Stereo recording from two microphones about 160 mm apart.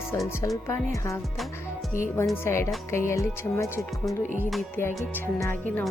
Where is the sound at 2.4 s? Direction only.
15° left (ahead or behind).